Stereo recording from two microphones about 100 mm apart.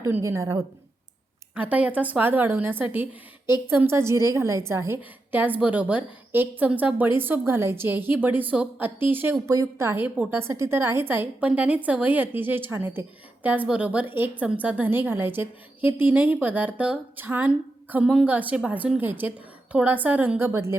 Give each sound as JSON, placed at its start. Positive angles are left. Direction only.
{"t": 0.2, "sound": "a woman's voice", "side_deg": -30}
{"t": 1.5, "sound": "a woman's voice", "side_deg": -15}